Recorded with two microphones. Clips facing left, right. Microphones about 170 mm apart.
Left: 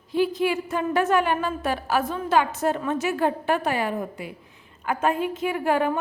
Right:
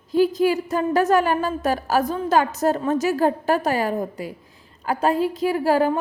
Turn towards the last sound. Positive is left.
turn(degrees=-35)  # may be behind; listen again after turning